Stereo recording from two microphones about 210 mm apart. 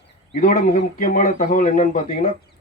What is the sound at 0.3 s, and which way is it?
A man's voice, 40° left (ahead or behind).